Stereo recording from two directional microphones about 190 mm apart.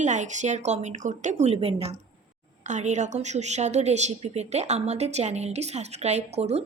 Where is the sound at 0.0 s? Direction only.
40° right (ahead or behind).